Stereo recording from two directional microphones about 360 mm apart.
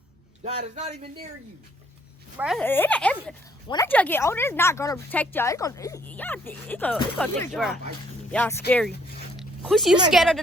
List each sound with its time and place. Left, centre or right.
0.4 s a man's voice: centre
2.4 s speech: centre
9.4 s a sound: centre
10.1 s speech: centre